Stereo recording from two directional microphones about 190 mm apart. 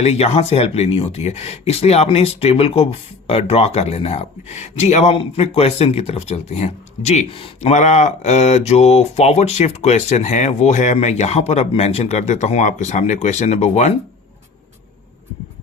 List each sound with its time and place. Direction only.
0.0 s speech: 35° left (ahead or behind)